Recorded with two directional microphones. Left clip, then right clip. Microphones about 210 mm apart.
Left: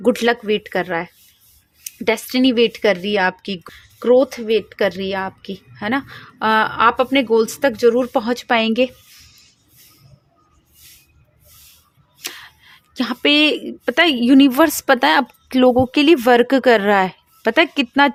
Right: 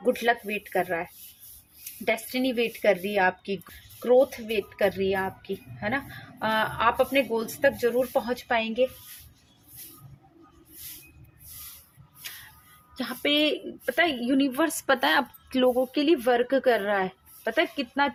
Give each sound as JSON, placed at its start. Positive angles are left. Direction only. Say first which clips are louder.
{"t": 0.0, "sound": "speech", "louder": "left 8 dB", "side_deg": 55}
{"t": 2.0, "sound": "speech", "louder": "left 9 dB", "side_deg": 55}
{"t": 13.0, "sound": "a woman's voice", "louder": "left 10 dB", "side_deg": 50}